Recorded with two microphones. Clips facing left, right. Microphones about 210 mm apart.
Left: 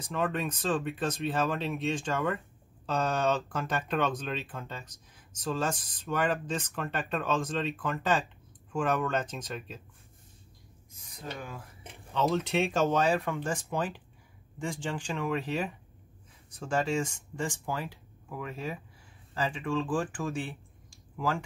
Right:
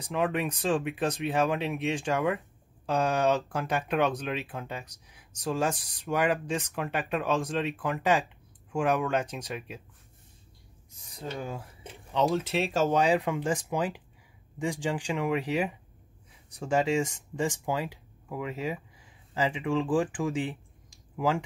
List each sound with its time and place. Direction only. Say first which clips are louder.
0.0 s speech: right 3 dB; 15° right (ahead or behind)
11.1 s speech: right 5 dB; 30° right (ahead or behind)
12.1 s speech: right 2 dB; 15° right (ahead or behind)